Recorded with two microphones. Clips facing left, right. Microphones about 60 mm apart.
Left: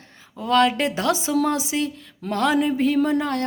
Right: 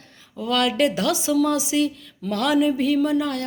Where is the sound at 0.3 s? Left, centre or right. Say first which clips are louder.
Left 2 dB; left.